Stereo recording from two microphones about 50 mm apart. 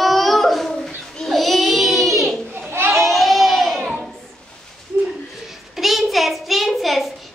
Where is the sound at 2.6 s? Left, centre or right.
Right.